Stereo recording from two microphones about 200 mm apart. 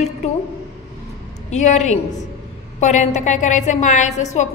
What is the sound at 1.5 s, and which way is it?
A woman's voice, 35° left (ahead or behind).